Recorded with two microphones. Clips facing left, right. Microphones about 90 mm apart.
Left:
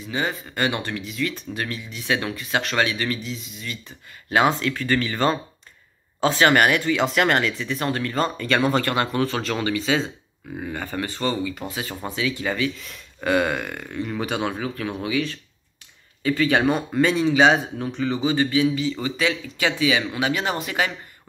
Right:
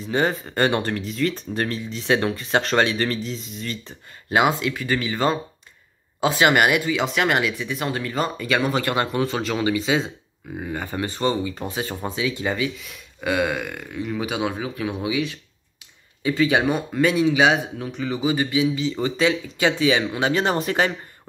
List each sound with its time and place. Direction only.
0.0 s speech: 35° right (ahead or behind)
4.3 s speech: 15° right (ahead or behind); by 8.8 s centre (ahead or behind)
8.8 s speech: 20° right (ahead or behind)
9.8 s speech: 5° right (ahead or behind); by 12.7 s 20° right (ahead or behind)
12.7 s speech: 5° right (ahead or behind)
16.7 s speech: 5° right (ahead or behind)
18.2 s speech: 15° right (ahead or behind); by 20.9 s 35° right (ahead or behind)